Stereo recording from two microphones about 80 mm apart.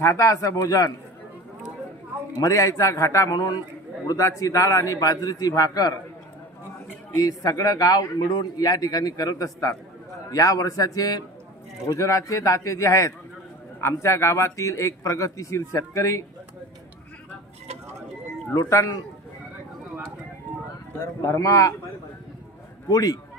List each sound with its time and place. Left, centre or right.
0.0 s a man's voice: left
2.3 s a man's voice: left
7.2 s a man's voice: left
18.5 s a man's voice: left
21.3 s a man's voice: left
22.8 s a man's voice: left